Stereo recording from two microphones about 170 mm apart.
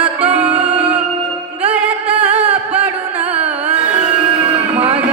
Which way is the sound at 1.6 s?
10° right (ahead or behind).